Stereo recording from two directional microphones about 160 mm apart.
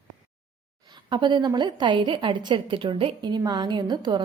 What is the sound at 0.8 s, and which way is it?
A woman's voice, 25° right (ahead or behind).